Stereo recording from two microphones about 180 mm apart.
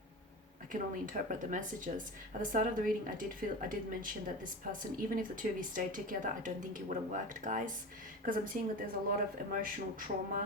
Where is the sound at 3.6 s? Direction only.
50° right (ahead or behind).